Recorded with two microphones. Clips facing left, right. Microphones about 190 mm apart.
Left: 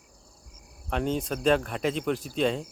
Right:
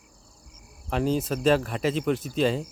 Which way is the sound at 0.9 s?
Centre (ahead or behind).